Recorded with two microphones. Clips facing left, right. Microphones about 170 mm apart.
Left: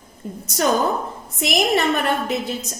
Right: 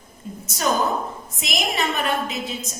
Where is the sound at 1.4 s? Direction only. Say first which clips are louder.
Left 8 dB; 60° left (ahead or behind).